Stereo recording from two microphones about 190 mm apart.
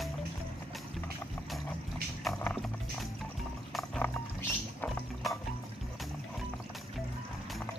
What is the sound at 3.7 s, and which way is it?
Music, 5° left (ahead or behind).